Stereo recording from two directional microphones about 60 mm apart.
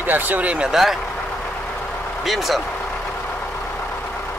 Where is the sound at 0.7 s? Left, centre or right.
Centre.